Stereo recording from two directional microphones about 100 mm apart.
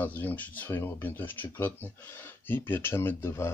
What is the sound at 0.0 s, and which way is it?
Speech, 20° left (ahead or behind).